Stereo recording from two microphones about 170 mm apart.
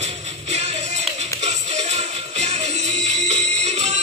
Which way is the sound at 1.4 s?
40° right (ahead or behind).